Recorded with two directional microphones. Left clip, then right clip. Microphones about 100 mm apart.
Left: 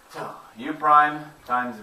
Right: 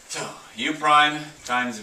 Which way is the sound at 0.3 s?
25° right (ahead or behind).